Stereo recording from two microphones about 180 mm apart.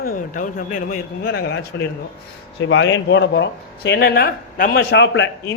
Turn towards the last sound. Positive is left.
turn(degrees=80)